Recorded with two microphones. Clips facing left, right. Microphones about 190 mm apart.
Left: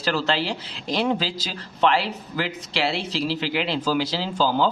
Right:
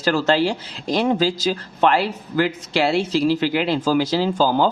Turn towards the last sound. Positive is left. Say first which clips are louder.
# right 5 dB
turn(degrees=-45)  # may be behind; listen again after turning